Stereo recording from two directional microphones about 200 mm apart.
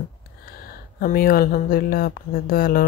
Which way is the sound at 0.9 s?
45° left (ahead or behind).